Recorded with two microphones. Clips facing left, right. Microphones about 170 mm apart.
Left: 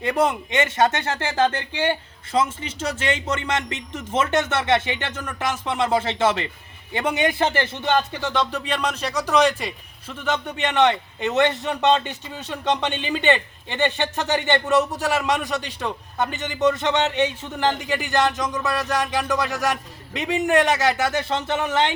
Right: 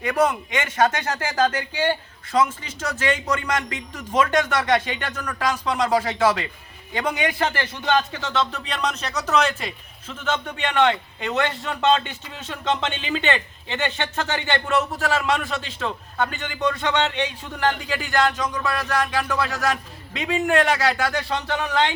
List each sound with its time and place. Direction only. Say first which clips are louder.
0.0 s speech: even; 25° left (ahead or behind)